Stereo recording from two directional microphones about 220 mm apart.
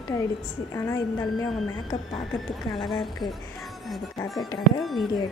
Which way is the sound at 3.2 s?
15° left (ahead or behind).